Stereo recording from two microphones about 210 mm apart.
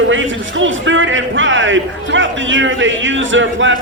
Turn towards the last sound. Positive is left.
turn(degrees=-65)  # may be behind; listen again after turning